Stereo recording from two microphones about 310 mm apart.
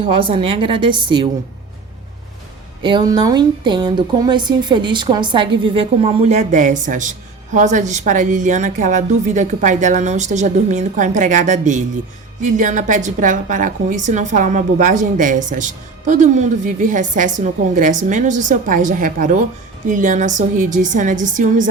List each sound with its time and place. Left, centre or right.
0.2 s speech: centre
2.8 s a woman's voice: centre